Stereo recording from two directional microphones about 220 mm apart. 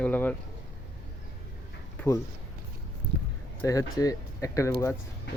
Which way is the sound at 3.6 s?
15° left (ahead or behind).